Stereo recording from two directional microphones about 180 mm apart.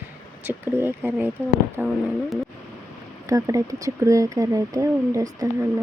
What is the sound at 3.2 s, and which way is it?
Speech, 20° right (ahead or behind).